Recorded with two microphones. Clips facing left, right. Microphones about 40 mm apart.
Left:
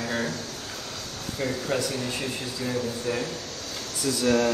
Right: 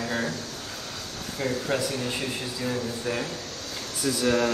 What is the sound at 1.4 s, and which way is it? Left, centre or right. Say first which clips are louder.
A man's voice: even; centre.